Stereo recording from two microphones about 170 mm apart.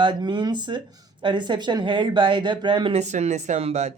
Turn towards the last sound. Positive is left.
turn(degrees=-40)  # may be behind; listen again after turning